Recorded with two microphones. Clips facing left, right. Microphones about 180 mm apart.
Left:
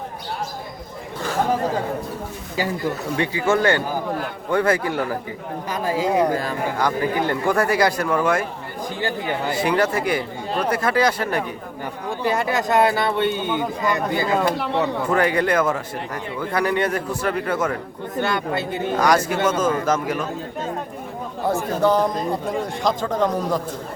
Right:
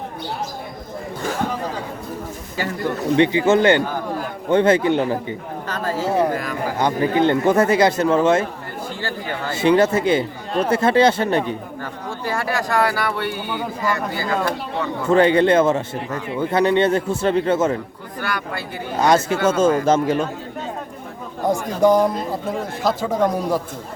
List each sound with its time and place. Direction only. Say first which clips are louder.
3.2 s a man's voice: right 6 dB; 20° right (ahead or behind)
5.6 s speech: left 1 dB; 10° left (ahead or behind)
6.3 s speech: left 1 dB; 30° left (ahead or behind)
6.7 s a man's voice: right 5 dB; 25° right (ahead or behind)
9.0 s speech: left 5 dB; 15° left (ahead or behind)
9.5 s a man's voice: right 6 dB; 25° right (ahead or behind)
12.2 s speech: left 2 dB; 20° left (ahead or behind)
15.0 s a man's voice: right 9 dB; 25° right (ahead or behind)
18.2 s speech: left 4 dB; 25° left (ahead or behind)
18.9 s a man's voice: right 3 dB; 25° right (ahead or behind)
21.4 s speech: right 3 dB; 15° right (ahead or behind)